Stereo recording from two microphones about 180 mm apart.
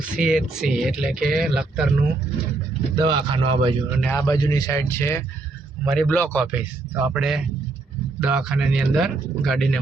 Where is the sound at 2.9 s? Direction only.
25° right (ahead or behind).